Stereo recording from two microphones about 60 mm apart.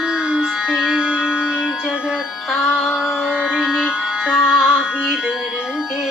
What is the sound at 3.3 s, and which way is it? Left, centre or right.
Music, centre.